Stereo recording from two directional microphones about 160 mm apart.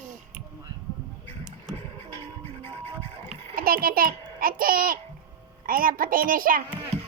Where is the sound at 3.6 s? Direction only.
65° right (ahead or behind).